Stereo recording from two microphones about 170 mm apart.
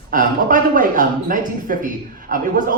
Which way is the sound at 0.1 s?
55° right (ahead or behind).